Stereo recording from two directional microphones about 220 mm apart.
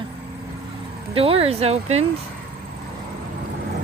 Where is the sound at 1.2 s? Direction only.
25° right (ahead or behind).